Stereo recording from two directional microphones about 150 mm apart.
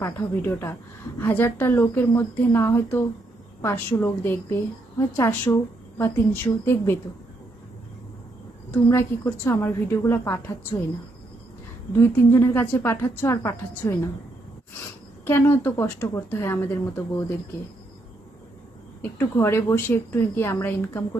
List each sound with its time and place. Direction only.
0.0 s a woman's voice: 20° left (ahead or behind)
8.7 s speech: 15° left (ahead or behind)
11.9 s speech: 15° left (ahead or behind)
15.2 s speech: 15° left (ahead or behind)
19.2 s speech: 15° left (ahead or behind)